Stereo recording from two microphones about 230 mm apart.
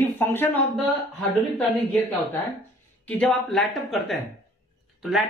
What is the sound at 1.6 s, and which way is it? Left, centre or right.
A woman's voice, centre.